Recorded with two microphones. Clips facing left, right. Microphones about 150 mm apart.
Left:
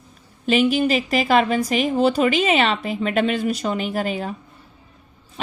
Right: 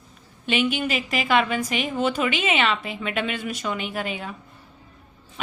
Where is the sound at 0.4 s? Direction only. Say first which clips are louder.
Left 6 dB; 35° left (ahead or behind).